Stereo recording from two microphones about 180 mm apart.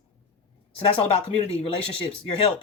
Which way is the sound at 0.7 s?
35° left (ahead or behind).